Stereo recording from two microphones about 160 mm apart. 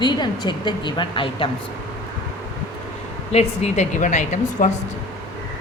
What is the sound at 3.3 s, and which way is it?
A woman's voice, 45° left (ahead or behind).